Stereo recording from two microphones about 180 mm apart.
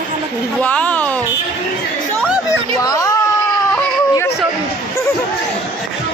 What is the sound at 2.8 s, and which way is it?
Speech, 20° left (ahead or behind).